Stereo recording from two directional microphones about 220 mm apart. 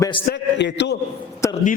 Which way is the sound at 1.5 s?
35° left (ahead or behind).